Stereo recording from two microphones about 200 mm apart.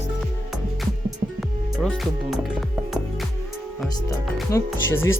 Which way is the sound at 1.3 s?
Centre (ahead or behind).